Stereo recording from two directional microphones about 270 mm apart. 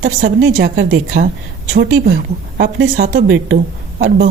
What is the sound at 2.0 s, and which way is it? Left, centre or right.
A woman's voice, right.